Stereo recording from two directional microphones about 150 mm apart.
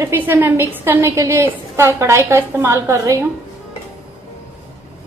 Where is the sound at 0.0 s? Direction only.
15° right (ahead or behind).